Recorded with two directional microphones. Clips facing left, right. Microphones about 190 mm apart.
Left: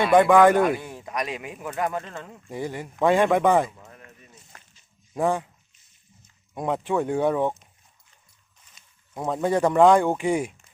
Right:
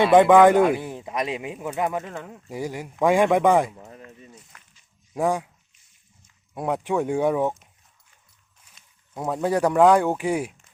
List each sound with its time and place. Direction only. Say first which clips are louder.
0.0 s a man's voice: right 2 dB; 20° right (ahead or behind)
3.8 s a sound: right 5 dB; 25° right (ahead or behind)
5.1 s speech: even; 10° right (ahead or behind)
6.5 s speech: even; 10° right (ahead or behind)
9.1 s speech: even; 10° right (ahead or behind)